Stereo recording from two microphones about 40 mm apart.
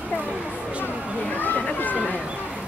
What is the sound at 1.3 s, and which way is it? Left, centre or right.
Speech, left.